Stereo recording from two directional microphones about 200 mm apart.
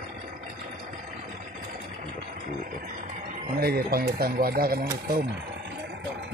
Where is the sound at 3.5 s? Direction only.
50° right (ahead or behind).